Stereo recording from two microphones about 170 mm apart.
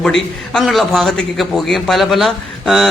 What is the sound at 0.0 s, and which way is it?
A man's voice, 5° left (ahead or behind).